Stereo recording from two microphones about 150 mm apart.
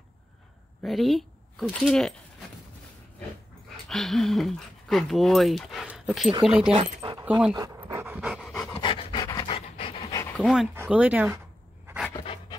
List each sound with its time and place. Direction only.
0.8 s speech: centre (ahead or behind)
3.9 s speech: centre (ahead or behind)
6.7 s speech: 40° right (ahead or behind)
7.2 s speech: 10° right (ahead or behind)
7.5 s pant: 20° right (ahead or behind); by 8.6 s centre (ahead or behind)
8.7 s pant: 35° left (ahead or behind)
9.5 s pant: 40° left (ahead or behind)
10.3 s speech: 5° left (ahead or behind)
10.7 s speech: 10° right (ahead or behind)
12.1 s pant: 30° left (ahead or behind)